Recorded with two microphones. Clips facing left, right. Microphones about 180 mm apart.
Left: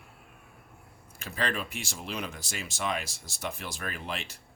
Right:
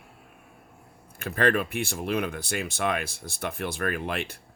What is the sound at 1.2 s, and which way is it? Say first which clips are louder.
Speech: right 8 dB; 55° right (ahead or behind).